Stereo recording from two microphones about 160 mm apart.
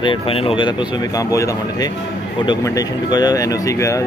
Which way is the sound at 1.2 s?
20° left (ahead or behind).